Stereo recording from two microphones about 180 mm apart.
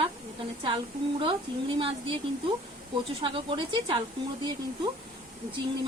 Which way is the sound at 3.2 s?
30° right (ahead or behind).